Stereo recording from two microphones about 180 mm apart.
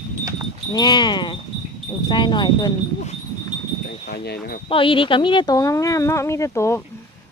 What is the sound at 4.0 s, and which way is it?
Chime, 60° left (ahead or behind).